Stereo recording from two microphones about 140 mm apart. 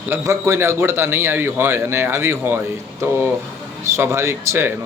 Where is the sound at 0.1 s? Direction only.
20° right (ahead or behind).